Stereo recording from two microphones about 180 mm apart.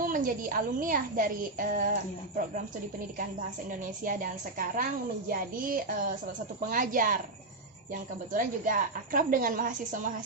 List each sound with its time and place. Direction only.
0.0 s a woman's voice: 50° right (ahead or behind)
3.7 s a woman's voice: 50° right (ahead or behind)
8.3 s a woman's voice: 50° right (ahead or behind)